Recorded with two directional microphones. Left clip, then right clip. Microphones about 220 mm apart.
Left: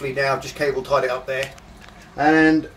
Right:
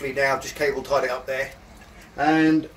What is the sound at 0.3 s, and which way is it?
Speech, centre (ahead or behind).